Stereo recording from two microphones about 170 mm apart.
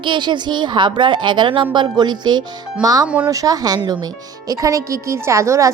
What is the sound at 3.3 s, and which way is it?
A woman's voice, 20° right (ahead or behind).